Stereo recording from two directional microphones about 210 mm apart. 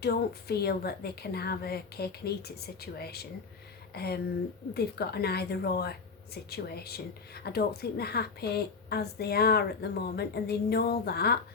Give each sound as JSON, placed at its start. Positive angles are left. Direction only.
{"t": 0.0, "sound": "a woman's voice", "side_deg": 50}